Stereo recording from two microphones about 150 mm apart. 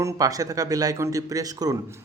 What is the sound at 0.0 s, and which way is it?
Speech, 25° right (ahead or behind).